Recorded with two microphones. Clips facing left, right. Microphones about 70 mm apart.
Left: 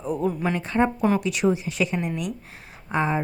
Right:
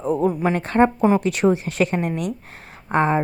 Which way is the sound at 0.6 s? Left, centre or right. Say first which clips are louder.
Right 6 dB; right.